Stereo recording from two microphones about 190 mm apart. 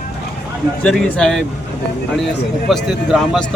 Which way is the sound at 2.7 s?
Centre (ahead or behind).